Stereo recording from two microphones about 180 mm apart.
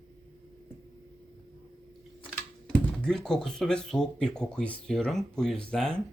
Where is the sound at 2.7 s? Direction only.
5° left (ahead or behind).